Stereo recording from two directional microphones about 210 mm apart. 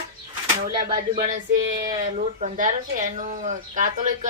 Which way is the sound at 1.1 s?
35° right (ahead or behind).